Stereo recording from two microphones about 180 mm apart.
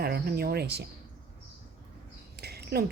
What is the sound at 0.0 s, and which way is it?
Speech, 60° right (ahead or behind).